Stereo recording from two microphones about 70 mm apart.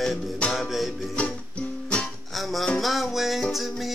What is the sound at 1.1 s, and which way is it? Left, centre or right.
Music, centre.